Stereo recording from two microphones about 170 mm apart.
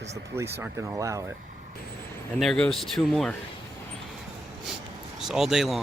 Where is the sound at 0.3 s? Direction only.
15° right (ahead or behind).